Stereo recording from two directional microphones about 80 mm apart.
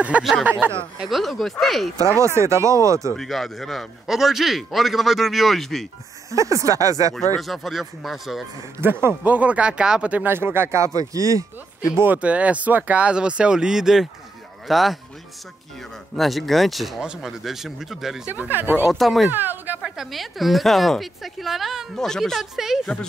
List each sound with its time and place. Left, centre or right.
0.2 s speech: centre
2.1 s speech: right
3.2 s speech: centre
6.3 s speech: right
7.3 s speech: centre
8.8 s speech: right
10.3 s speech: right
12.0 s speech: centre
16.2 s speech: centre
18.3 s speech: right
18.9 s speech: centre
19.2 s speech: right
19.8 s speech: centre